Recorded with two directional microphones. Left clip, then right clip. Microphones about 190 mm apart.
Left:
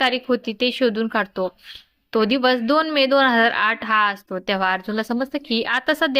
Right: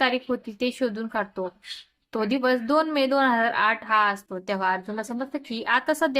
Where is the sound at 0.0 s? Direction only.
20° left (ahead or behind).